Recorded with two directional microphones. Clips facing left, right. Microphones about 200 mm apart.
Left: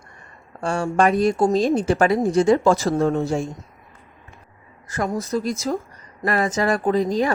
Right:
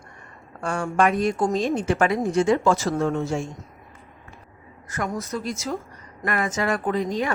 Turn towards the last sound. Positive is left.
turn(degrees=35)  # may be behind; listen again after turning